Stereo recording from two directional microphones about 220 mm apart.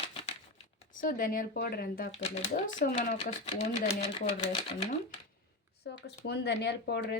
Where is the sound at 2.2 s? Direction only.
30° left (ahead or behind).